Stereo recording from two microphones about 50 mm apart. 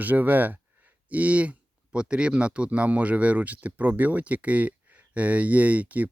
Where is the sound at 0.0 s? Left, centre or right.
Right.